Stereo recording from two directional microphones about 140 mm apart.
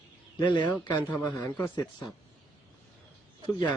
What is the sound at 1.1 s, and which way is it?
Speech, 10° left (ahead or behind).